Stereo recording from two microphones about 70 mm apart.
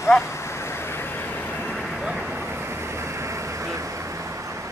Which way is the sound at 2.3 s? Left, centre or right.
Right.